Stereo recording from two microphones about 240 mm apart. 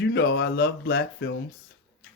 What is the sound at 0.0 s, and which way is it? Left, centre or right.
Speech, left.